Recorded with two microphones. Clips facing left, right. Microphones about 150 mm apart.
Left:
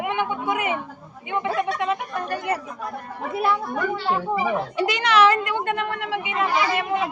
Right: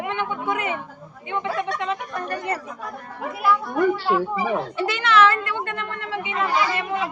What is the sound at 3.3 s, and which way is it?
Speech, 25° left (ahead or behind).